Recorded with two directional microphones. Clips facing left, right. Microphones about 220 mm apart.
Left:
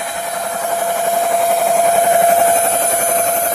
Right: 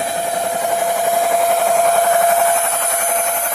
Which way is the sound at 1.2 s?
5° right (ahead or behind).